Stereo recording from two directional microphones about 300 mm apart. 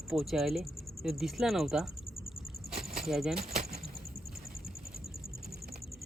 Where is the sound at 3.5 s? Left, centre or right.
Right.